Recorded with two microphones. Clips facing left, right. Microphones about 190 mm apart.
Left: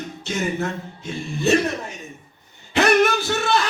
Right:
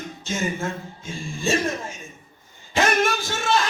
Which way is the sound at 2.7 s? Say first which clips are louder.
Left 4 dB; 65° left (ahead or behind).